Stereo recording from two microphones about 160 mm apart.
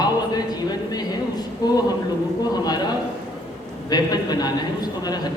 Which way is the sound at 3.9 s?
25° left (ahead or behind).